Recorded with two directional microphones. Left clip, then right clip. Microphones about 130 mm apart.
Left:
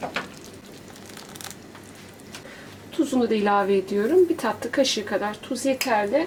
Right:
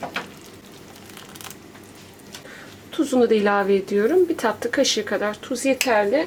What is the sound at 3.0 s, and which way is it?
Speech, 35° right (ahead or behind).